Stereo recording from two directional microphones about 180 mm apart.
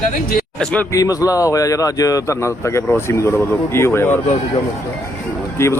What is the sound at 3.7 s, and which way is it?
Speech, 15° left (ahead or behind).